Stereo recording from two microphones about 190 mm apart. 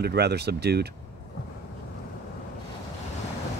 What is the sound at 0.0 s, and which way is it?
Speech, 60° right (ahead or behind).